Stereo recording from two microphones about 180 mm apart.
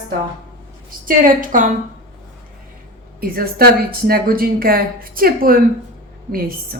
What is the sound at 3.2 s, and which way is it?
A woman's voice, 55° right (ahead or behind).